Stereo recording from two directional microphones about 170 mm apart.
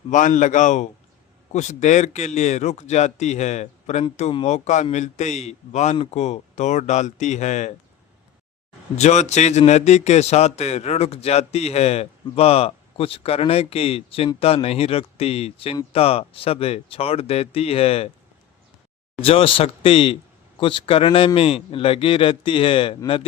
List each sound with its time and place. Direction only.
0.1 s a man's voice: 50° left (ahead or behind)
9.0 s speech: 40° left (ahead or behind)
19.2 s speech: 35° left (ahead or behind)